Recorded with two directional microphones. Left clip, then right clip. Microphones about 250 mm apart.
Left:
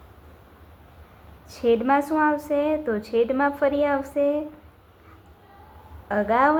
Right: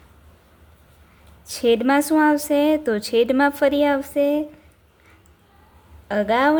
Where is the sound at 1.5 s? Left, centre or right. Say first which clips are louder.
Right 2 dB; right.